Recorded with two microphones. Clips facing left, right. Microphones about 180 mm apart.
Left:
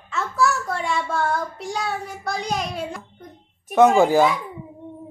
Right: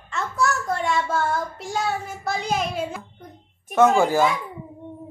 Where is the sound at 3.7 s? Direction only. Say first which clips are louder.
Left 2 dB; 15° left (ahead or behind).